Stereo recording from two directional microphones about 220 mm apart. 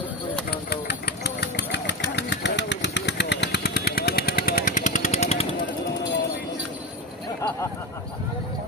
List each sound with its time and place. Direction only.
0.7 s engine: 45° left (ahead or behind); by 5.5 s 30° left (ahead or behind)